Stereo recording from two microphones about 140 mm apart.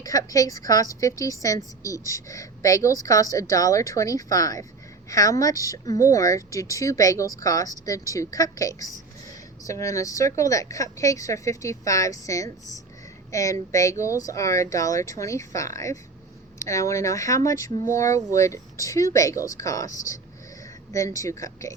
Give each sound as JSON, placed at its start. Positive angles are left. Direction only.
{"t": 0.0, "sound": "a woman's voice", "side_deg": 25}